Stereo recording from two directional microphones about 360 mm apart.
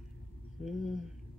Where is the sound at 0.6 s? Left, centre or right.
Centre.